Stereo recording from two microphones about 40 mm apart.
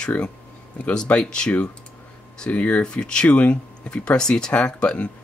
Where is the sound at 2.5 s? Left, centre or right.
Left.